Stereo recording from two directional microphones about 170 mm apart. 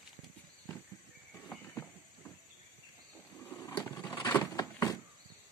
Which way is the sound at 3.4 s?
15° left (ahead or behind).